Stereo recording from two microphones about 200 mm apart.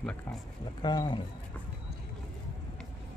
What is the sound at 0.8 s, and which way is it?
Speech, 20° left (ahead or behind).